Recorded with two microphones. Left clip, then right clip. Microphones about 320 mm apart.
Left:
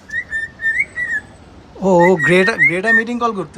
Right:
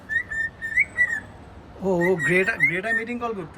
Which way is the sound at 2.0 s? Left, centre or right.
Left.